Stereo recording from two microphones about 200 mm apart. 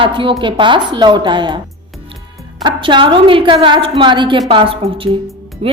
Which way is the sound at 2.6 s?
25° right (ahead or behind).